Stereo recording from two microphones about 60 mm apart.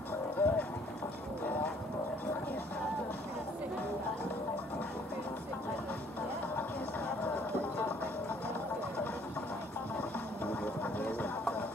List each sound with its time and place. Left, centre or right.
0.4 s music: left
9.9 s music: left